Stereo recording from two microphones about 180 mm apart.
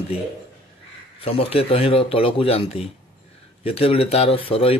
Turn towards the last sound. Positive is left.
turn(degrees=30)  # may be behind; listen again after turning